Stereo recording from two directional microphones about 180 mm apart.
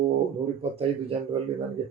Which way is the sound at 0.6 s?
30° right (ahead or behind).